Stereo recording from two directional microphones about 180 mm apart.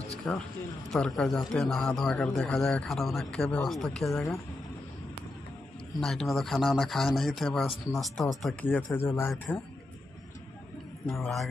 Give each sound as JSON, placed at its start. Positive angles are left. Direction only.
{"t": 0.3, "sound": "speech", "side_deg": 10}
{"t": 5.9, "sound": "speech", "side_deg": 0}
{"t": 11.1, "sound": "speech", "side_deg": 0}